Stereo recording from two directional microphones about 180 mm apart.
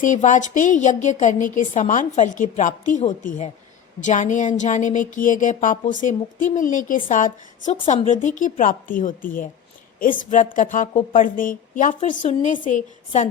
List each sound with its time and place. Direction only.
0.0 s a woman's voice: 45° left (ahead or behind)